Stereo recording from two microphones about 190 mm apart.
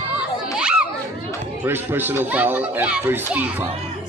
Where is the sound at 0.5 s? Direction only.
5° right (ahead or behind).